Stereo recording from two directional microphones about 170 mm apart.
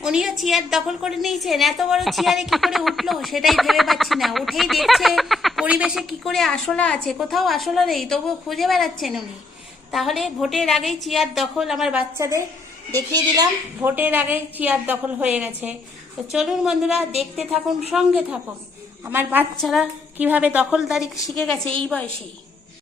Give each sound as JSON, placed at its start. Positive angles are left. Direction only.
{"t": 0.0, "sound": "a woman's voice", "side_deg": -5}
{"t": 13.9, "sound": "a woman's voice", "side_deg": -10}